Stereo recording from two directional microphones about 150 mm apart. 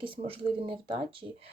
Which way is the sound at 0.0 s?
35° right (ahead or behind).